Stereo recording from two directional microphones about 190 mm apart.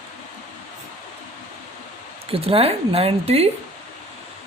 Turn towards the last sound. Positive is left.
turn(degrees=-30)  # may be behind; listen again after turning